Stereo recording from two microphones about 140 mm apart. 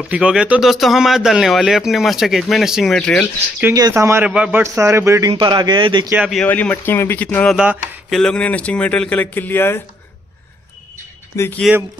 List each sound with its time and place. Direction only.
0.1 s speech: 5° right (ahead or behind)
3.9 s a sound: 15° right (ahead or behind)
4.3 s speech: 10° right (ahead or behind)
5.3 s a man's voice: 35° right (ahead or behind)
6.3 s speech: 10° left (ahead or behind)
7.5 s a sound: 5° right (ahead or behind)
8.2 s speech: 10° left (ahead or behind)
11.3 s speech: 20° left (ahead or behind)